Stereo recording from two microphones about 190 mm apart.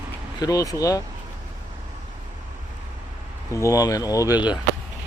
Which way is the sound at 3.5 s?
15° left (ahead or behind).